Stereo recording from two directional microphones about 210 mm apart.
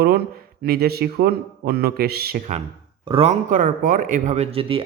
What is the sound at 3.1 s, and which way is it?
Speech, 30° right (ahead or behind).